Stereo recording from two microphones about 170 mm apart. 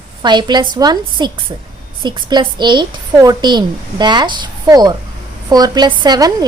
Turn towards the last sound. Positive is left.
turn(degrees=-25)  # may be behind; listen again after turning